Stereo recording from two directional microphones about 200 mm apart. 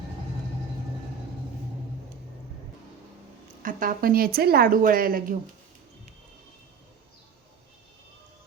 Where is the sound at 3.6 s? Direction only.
45° right (ahead or behind).